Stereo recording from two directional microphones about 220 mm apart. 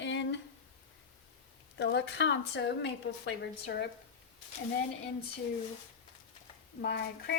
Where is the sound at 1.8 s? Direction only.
50° left (ahead or behind).